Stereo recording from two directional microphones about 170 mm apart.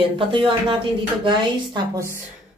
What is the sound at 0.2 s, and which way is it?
Speech, 30° right (ahead or behind).